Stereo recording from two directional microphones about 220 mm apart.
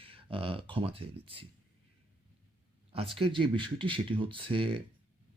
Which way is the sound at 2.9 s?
25° right (ahead or behind).